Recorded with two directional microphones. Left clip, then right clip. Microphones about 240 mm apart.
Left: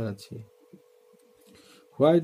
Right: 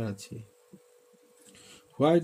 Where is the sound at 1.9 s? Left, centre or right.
Centre.